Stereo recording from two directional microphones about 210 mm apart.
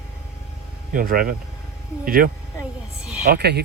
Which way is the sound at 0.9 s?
40° right (ahead or behind).